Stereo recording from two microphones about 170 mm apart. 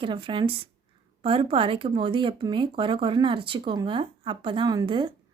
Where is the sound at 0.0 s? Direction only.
30° right (ahead or behind).